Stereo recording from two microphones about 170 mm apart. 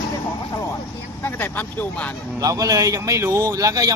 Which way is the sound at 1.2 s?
10° left (ahead or behind).